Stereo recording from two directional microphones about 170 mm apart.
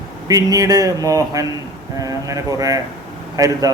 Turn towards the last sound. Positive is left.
turn(degrees=-20)  # may be behind; listen again after turning